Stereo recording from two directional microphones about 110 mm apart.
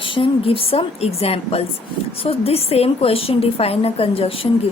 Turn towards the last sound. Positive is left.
turn(degrees=60)  # may be behind; listen again after turning